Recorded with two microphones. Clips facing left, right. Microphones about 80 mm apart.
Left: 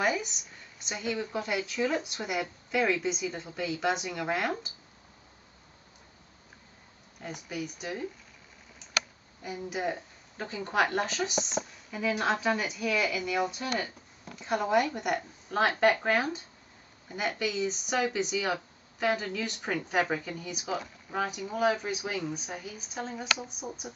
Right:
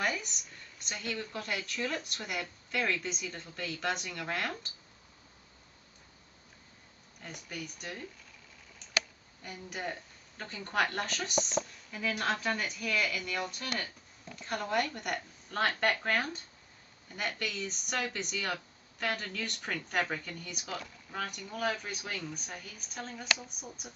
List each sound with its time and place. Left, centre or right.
0.0 s a woman's voice: centre
7.4 s a woman's voice: centre
9.4 s a woman's voice: centre